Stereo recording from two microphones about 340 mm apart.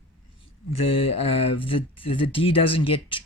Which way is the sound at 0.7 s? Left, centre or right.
Centre.